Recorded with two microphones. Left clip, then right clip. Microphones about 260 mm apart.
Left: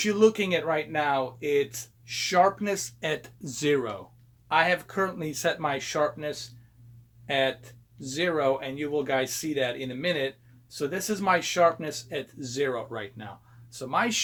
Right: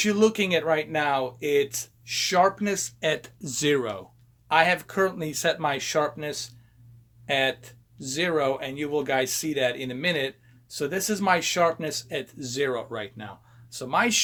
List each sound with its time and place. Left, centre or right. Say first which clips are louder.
0.0 s speech: even; right